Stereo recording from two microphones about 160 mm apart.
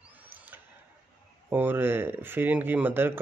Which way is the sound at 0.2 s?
15° right (ahead or behind).